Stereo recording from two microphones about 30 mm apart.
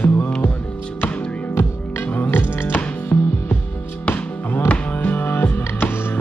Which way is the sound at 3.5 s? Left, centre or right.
Left.